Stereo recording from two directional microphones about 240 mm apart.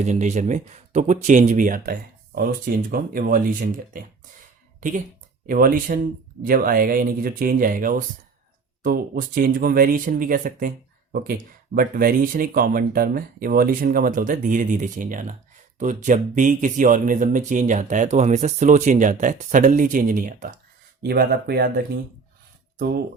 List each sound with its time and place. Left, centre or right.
0.0 s speech: right